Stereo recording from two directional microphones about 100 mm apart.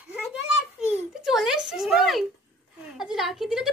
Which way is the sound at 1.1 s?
5° right (ahead or behind).